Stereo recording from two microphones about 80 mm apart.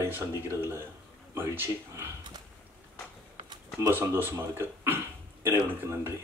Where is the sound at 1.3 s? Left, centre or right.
Right.